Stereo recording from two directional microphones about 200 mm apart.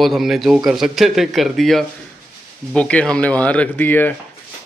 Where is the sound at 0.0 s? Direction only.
Centre (ahead or behind).